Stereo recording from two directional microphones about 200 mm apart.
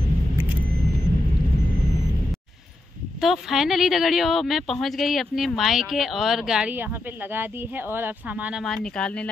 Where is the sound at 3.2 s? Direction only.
Centre (ahead or behind).